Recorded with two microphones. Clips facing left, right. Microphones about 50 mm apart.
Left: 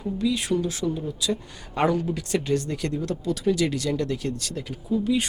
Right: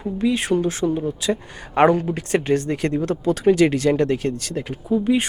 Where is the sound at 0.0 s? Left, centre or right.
Right.